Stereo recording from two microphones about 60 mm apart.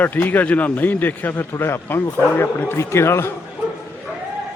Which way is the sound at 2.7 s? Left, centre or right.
Left.